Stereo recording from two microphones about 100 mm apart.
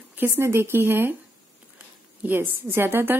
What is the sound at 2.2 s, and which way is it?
Speech, 20° right (ahead or behind).